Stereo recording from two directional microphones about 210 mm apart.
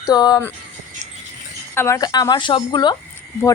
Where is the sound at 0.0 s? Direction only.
20° left (ahead or behind).